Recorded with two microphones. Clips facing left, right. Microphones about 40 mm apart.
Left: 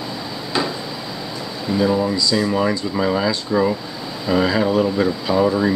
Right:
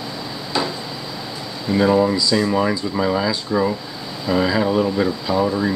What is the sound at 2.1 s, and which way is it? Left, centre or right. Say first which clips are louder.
Speech: right 1 dB; centre.